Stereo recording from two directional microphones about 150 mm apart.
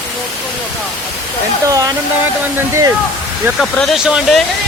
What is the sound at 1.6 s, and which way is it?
Speech, 20° right (ahead or behind).